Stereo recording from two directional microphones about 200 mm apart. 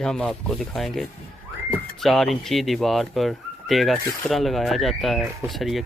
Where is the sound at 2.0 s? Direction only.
Centre (ahead or behind).